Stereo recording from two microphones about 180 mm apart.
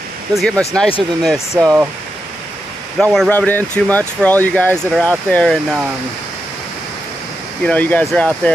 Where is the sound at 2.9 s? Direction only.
5° left (ahead or behind).